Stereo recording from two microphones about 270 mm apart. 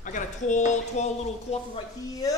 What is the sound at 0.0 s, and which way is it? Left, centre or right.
Speech, left.